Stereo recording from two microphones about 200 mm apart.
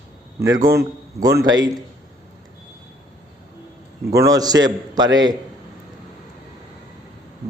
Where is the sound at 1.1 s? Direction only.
15° right (ahead or behind).